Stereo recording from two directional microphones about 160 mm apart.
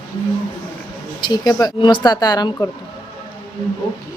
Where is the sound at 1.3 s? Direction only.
25° left (ahead or behind).